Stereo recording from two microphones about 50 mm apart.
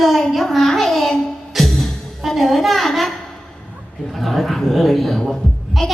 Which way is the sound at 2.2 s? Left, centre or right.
Centre.